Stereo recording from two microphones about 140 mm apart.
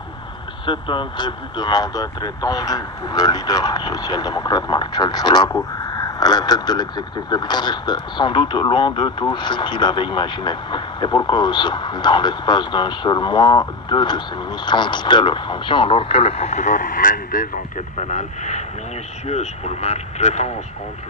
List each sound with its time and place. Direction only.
0.7 s speech: 35° left (ahead or behind); by 20.5 s 55° left (ahead or behind)